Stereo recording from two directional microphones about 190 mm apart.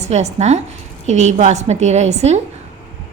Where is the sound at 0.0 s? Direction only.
35° right (ahead or behind).